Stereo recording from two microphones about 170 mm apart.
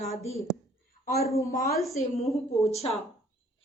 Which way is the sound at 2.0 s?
35° left (ahead or behind).